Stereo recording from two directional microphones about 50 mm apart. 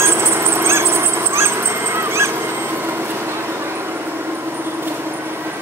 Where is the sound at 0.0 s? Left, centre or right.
Right.